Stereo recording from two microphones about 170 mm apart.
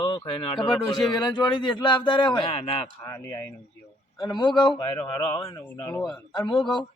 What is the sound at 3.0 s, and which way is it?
A man's voice, 20° left (ahead or behind).